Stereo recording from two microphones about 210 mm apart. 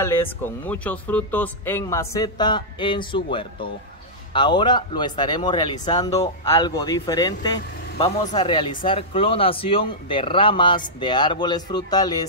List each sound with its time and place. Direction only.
0.0 s a man's voice: 10° left (ahead or behind)